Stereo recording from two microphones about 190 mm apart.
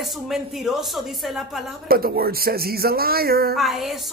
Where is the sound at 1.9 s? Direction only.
50° right (ahead or behind).